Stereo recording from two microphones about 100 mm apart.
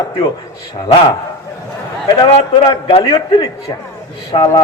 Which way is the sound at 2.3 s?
70° left (ahead or behind).